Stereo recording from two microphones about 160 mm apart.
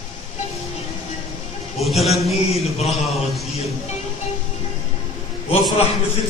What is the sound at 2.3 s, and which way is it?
Speech, 40° left (ahead or behind).